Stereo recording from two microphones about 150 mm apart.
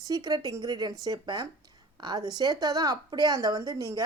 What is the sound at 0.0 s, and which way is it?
Speech, 25° right (ahead or behind).